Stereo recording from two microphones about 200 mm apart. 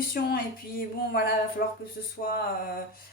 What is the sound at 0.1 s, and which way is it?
Speech, 45° left (ahead or behind).